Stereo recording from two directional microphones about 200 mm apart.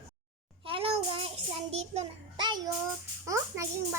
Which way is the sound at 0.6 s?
30° right (ahead or behind).